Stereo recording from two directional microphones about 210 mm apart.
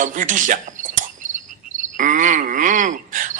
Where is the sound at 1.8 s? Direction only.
40° right (ahead or behind).